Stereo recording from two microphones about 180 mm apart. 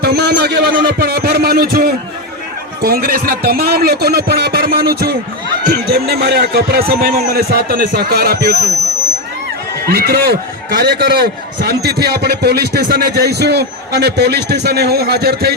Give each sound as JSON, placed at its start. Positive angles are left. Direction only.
{"t": 0.0, "sound": "a sound", "side_deg": -65}
{"t": 2.8, "sound": "a man's voice", "side_deg": -60}
{"t": 9.8, "sound": "a man's voice", "side_deg": -60}